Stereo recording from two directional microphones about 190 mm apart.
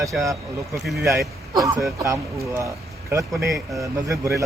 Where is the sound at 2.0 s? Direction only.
15° right (ahead or behind).